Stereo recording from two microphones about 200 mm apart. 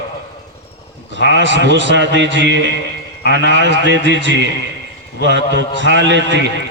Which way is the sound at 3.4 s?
60° right (ahead or behind).